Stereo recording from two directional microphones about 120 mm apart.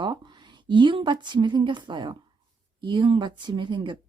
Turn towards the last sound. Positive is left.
turn(degrees=-40)  # may be behind; listen again after turning